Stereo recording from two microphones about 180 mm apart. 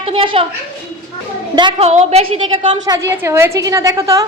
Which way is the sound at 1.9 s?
40° right (ahead or behind).